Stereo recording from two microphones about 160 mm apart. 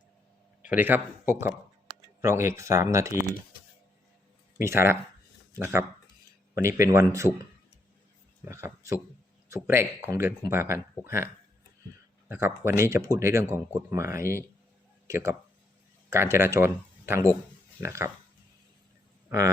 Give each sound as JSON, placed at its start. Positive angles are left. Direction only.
{"t": 0.6, "sound": "speech", "side_deg": -10}
{"t": 4.6, "sound": "a man's voice", "side_deg": -15}
{"t": 8.4, "sound": "a man's voice", "side_deg": -20}
{"t": 12.3, "sound": "speech", "side_deg": -15}